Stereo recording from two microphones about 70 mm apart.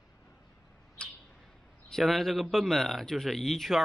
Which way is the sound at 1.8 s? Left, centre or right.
Centre.